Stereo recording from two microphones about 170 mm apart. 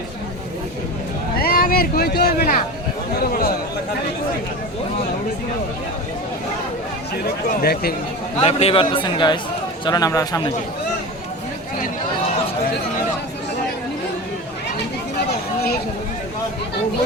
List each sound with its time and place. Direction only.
1.4 s speech: 60° left (ahead or behind)
7.6 s speech: 65° left (ahead or behind)
8.4 s a man's voice: 35° left (ahead or behind); by 10.5 s 20° left (ahead or behind)